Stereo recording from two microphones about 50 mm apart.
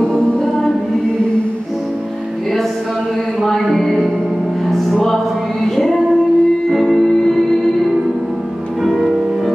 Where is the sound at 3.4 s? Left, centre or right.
Centre.